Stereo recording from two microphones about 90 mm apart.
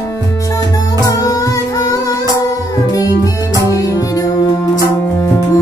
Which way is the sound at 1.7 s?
40° left (ahead or behind).